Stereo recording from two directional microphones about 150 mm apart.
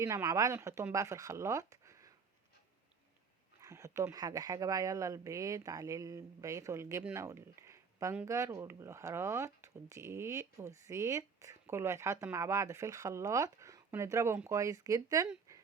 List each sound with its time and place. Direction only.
0.0 s speech: 20° right (ahead or behind)
3.6 s speech: 20° right (ahead or behind)